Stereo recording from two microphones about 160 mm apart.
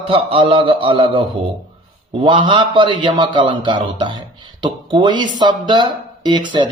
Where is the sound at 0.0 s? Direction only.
35° right (ahead or behind).